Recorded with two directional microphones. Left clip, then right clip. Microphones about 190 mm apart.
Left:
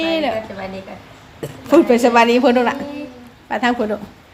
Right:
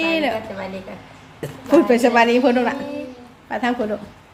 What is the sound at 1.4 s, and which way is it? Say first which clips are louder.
A woman's voice: left 2 dB; 5° left (ahead or behind).